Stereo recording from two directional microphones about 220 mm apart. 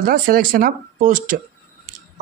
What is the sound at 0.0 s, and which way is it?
A man's voice, 40° right (ahead or behind).